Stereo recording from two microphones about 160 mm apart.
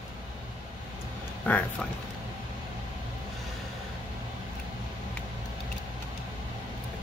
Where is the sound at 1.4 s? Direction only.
10° left (ahead or behind).